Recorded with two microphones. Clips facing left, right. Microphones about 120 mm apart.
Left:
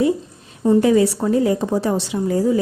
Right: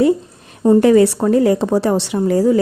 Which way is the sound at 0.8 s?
65° right (ahead or behind).